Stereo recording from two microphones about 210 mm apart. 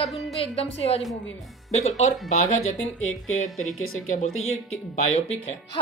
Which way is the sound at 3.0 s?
75° left (ahead or behind).